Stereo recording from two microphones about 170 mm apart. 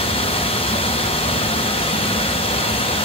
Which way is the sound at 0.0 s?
35° left (ahead or behind).